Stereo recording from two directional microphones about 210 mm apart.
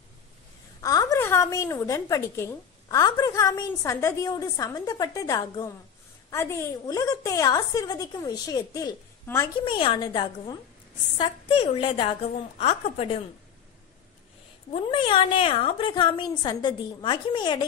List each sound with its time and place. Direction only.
0.7 s a woman's voice: 15° left (ahead or behind)
14.7 s a woman's voice: 25° left (ahead or behind)